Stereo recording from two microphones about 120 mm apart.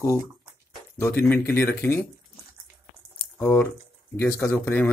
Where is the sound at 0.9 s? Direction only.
15° left (ahead or behind).